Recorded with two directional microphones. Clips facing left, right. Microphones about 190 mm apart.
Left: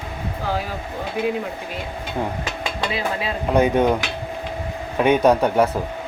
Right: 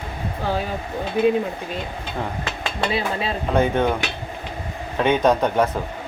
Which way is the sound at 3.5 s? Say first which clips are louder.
Left 3 dB; 10° left (ahead or behind).